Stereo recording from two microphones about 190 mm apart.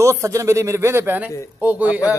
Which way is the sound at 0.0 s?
15° right (ahead or behind).